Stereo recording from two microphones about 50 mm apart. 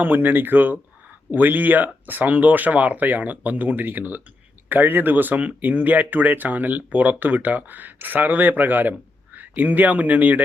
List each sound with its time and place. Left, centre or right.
0.0 s speech: right